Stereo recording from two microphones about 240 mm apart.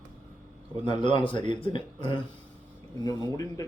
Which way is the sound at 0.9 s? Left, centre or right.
Centre.